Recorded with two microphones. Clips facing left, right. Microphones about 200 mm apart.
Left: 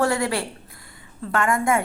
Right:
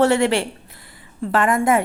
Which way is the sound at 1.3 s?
20° right (ahead or behind).